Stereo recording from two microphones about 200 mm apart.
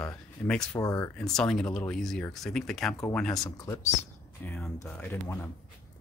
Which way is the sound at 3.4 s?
15° left (ahead or behind).